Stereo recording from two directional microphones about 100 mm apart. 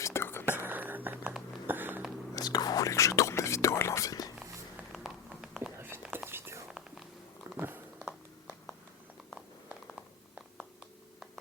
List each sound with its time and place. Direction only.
0.0 s whispering: 25° left (ahead or behind)
0.6 s whispering: 20° right (ahead or behind)
1.6 s a sound: 20° right (ahead or behind)
2.3 s whispering: 40° left (ahead or behind)
4.9 s a sound: 5° right (ahead or behind)
5.7 s whispering: 25° right (ahead or behind)
7.5 s dog: 20° right (ahead or behind)